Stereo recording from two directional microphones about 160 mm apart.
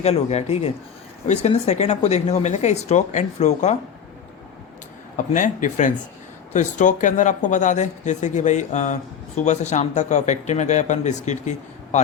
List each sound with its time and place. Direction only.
0.0 s speech: 40° left (ahead or behind)
5.1 s speech: 55° left (ahead or behind)